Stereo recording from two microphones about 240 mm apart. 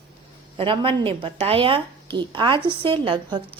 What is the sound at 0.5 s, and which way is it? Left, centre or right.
A woman's voice, right.